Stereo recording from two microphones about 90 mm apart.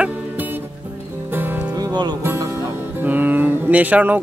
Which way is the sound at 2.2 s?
30° right (ahead or behind).